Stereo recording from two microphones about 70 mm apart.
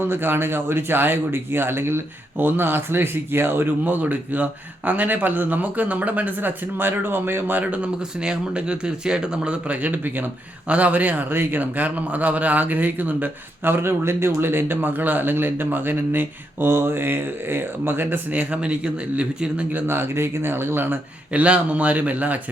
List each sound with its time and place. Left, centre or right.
0.0 s a man's voice: right
19.9 s a man's voice: right